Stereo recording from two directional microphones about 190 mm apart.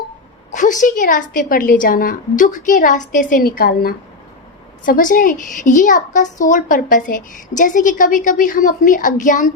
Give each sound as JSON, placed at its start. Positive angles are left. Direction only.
{"t": 0.5, "sound": "a woman's voice", "side_deg": 40}